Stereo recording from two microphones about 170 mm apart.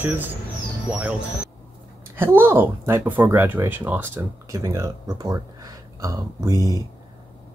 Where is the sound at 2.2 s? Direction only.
15° right (ahead or behind).